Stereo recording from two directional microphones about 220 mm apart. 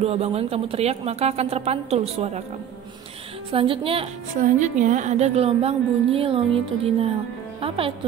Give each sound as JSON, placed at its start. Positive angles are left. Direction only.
{"t": 0.0, "sound": "a woman's voice", "side_deg": -30}
{"t": 3.5, "sound": "a woman's voice", "side_deg": -25}